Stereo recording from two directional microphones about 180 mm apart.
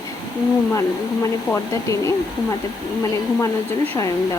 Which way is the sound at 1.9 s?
15° left (ahead or behind).